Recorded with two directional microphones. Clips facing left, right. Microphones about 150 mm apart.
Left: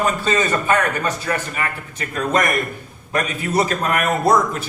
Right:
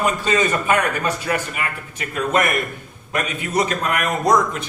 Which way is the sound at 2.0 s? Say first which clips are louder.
Even; 35° left (ahead or behind).